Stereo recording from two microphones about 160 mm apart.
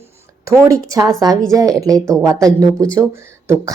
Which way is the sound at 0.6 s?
20° right (ahead or behind).